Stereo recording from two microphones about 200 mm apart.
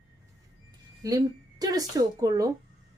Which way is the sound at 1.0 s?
15° right (ahead or behind).